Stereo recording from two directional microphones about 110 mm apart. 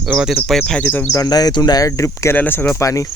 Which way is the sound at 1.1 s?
35° left (ahead or behind).